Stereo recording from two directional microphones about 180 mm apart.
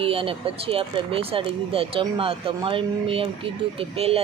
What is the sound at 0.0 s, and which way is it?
Speech, 30° right (ahead or behind).